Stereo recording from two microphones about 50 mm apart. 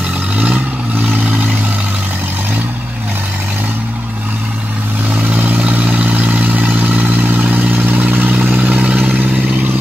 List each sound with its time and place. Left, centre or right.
5.1 s vehicle: right